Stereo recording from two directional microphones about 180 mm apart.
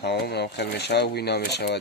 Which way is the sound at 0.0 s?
65° left (ahead or behind).